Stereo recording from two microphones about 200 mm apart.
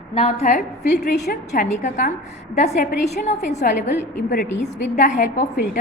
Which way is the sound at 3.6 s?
45° left (ahead or behind).